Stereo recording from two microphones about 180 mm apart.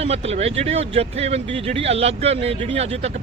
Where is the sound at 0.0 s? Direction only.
35° right (ahead or behind).